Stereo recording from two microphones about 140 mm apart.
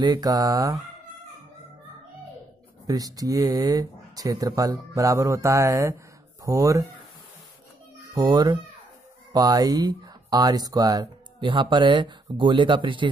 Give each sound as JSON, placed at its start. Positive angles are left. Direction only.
{"t": 0.0, "sound": "speech", "side_deg": -25}
{"t": 2.9, "sound": "speech", "side_deg": -25}
{"t": 8.1, "sound": "speech", "side_deg": -25}